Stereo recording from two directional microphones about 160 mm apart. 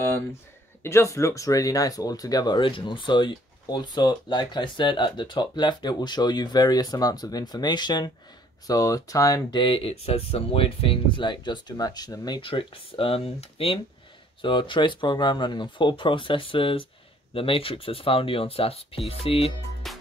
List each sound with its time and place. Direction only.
0.8 s speech: 15° left (ahead or behind); by 19.5 s 40° left (ahead or behind)
19.9 s music: centre (ahead or behind)